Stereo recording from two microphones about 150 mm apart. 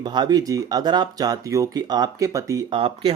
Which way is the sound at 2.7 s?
40° right (ahead or behind).